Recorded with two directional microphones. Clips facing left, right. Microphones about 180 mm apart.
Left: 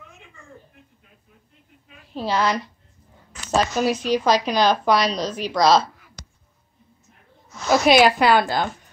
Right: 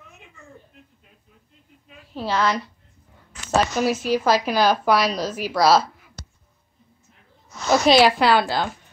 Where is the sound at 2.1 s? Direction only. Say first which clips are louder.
Left 1 dB; 15° left (ahead or behind).